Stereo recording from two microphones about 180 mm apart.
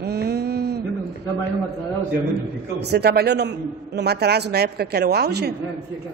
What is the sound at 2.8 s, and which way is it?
A man's voice, 65° right (ahead or behind).